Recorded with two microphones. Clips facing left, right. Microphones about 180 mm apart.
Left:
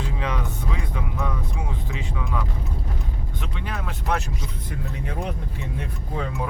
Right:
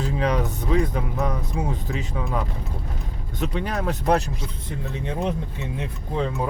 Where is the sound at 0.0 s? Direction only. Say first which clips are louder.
Right 6 dB; 40° right (ahead or behind).